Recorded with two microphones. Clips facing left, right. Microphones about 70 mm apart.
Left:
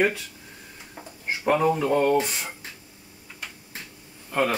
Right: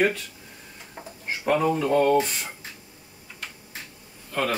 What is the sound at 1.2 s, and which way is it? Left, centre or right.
Speech, centre.